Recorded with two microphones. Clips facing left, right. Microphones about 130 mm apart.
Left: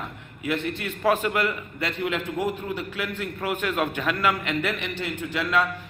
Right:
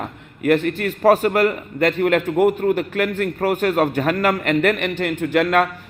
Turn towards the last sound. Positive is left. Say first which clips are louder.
# right 8 dB
turn(degrees=-55)  # may be behind; listen again after turning